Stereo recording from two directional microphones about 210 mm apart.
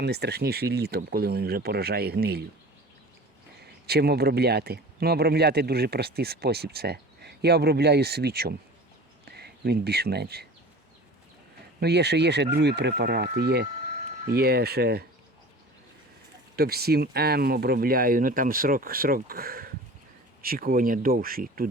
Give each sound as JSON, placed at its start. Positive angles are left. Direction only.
{"t": 0.0, "sound": "speech", "side_deg": -50}
{"t": 3.6, "sound": "speech", "side_deg": -50}
{"t": 11.8, "sound": "speech", "side_deg": -50}
{"t": 16.6, "sound": "speech", "side_deg": -50}